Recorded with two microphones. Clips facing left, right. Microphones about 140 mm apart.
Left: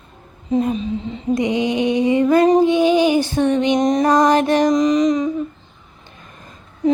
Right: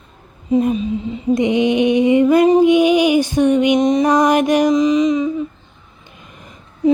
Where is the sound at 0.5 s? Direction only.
15° right (ahead or behind).